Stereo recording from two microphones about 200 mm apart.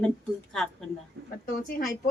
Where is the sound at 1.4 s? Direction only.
45° left (ahead or behind).